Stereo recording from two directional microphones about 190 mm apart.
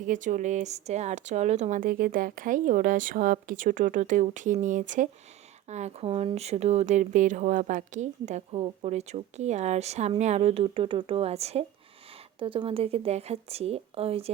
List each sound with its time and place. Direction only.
0.0 s speech: 40° right (ahead or behind)